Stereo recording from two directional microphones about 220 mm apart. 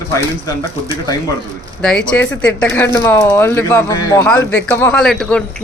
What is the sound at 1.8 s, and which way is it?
Speech, 5° left (ahead or behind).